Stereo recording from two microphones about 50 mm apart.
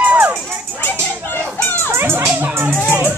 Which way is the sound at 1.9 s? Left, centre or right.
Right.